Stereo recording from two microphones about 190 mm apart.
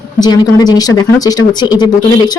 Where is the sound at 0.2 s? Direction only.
20° left (ahead or behind).